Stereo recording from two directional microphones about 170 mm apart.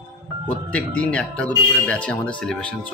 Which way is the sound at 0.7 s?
5° left (ahead or behind).